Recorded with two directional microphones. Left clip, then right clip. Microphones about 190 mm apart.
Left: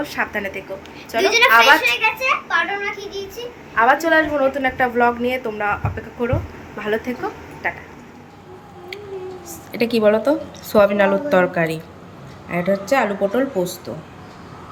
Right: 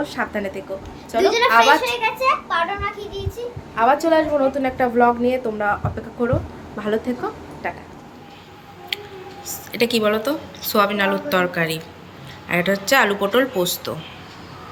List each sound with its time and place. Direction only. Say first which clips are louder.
0.0 s a child's voice: left 1 dB; 5° right (ahead or behind)
1.8 s a child's voice: left 3 dB; 30° right (ahead or behind)
2.2 s a child's voice: even; 10° right (ahead or behind)
3.8 s a woman's voice: left 1 dB; centre (ahead or behind)
6.7 s a child's voice: even; 10° right (ahead or behind)
8.9 s a sound: right 6 dB; 5° left (ahead or behind)
9.5 s a woman's voice: right 1 dB; 5° left (ahead or behind)